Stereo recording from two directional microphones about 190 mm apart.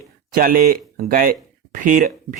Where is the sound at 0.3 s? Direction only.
50° right (ahead or behind).